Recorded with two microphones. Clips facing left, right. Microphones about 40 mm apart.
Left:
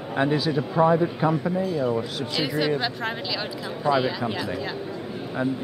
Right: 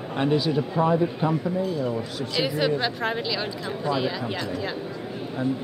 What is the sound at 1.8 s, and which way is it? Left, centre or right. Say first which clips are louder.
A woman's voice: left 3 dB; centre.